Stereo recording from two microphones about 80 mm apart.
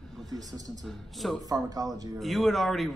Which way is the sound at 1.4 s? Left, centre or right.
Right.